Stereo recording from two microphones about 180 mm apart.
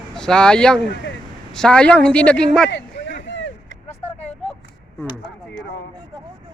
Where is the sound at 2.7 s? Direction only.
75° left (ahead or behind).